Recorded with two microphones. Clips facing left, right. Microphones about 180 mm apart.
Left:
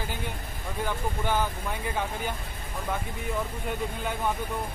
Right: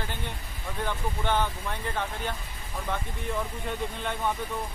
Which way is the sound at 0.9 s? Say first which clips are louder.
Even; 10° left (ahead or behind).